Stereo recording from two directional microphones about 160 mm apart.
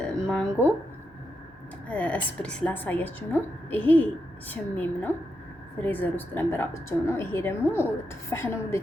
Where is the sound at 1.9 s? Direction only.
10° left (ahead or behind).